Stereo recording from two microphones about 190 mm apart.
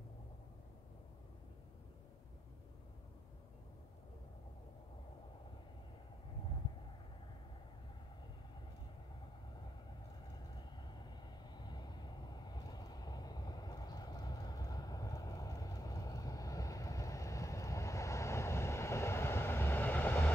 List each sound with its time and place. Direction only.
10.5 s vehicle: 20° left (ahead or behind)